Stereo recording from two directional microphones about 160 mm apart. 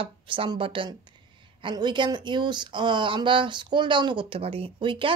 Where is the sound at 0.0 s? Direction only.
30° right (ahead or behind).